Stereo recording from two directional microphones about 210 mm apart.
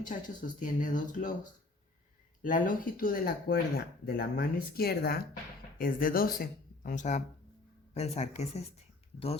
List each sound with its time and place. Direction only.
0.0 s speech: 40° left (ahead or behind)
2.4 s speech: 40° left (ahead or behind)